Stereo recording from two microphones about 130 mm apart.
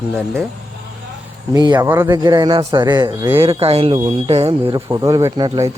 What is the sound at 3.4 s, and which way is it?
Speech, 50° right (ahead or behind).